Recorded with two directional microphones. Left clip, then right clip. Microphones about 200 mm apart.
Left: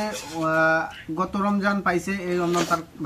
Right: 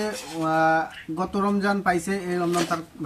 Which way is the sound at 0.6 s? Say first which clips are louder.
Even; 20° right (ahead or behind).